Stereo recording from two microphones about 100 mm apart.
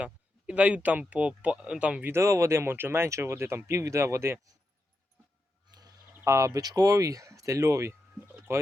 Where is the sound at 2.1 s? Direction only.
30° right (ahead or behind).